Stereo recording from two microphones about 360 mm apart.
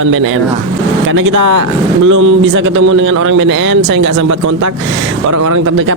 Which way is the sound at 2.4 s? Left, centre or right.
Right.